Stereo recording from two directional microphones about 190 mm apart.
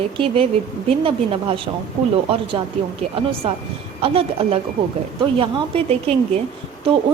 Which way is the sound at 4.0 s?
30° right (ahead or behind).